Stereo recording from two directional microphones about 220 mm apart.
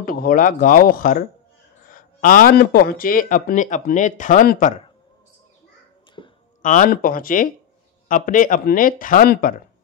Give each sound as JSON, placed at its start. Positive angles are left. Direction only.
{"t": 0.0, "sound": "speech", "side_deg": 40}
{"t": 6.2, "sound": "a sound", "side_deg": 25}
{"t": 6.6, "sound": "speech", "side_deg": 35}